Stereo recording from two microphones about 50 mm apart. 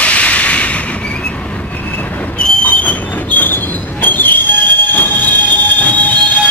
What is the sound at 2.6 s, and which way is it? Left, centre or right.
Train, left.